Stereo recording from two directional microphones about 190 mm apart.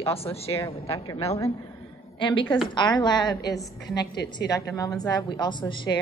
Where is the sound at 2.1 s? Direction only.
25° left (ahead or behind).